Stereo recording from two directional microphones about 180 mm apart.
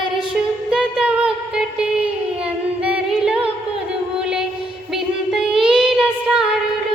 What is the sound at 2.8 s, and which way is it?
Singing, 5° right (ahead or behind).